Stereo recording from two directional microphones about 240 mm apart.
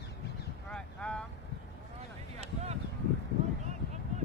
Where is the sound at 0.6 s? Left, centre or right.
Centre.